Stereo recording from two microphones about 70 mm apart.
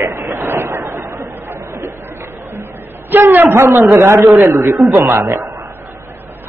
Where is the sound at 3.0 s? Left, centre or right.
Right.